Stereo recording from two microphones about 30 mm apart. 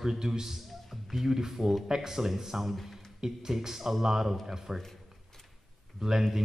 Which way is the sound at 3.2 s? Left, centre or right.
Centre.